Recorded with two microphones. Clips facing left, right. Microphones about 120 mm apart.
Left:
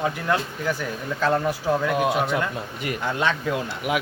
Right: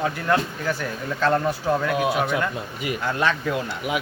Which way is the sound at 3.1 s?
20° left (ahead or behind).